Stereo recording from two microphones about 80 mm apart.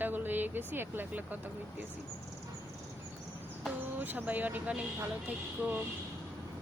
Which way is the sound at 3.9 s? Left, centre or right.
Right.